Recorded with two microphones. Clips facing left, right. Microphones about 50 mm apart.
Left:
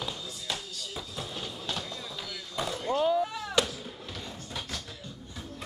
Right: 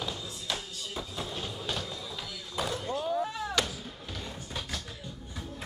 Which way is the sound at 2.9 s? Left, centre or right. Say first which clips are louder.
Left 9 dB; left.